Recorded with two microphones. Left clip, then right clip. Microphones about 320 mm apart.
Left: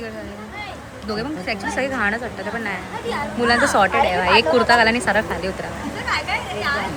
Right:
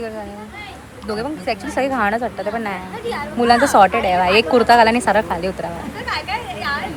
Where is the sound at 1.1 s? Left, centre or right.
Centre.